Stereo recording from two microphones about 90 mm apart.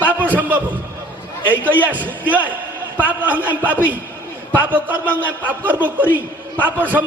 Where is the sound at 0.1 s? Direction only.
20° right (ahead or behind).